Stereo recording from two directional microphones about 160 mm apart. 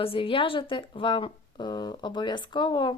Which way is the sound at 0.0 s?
35° left (ahead or behind).